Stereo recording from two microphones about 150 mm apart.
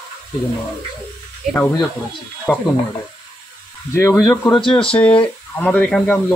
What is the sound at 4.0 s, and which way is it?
Speech, 20° left (ahead or behind).